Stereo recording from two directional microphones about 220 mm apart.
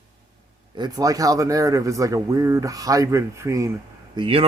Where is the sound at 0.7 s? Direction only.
20° right (ahead or behind).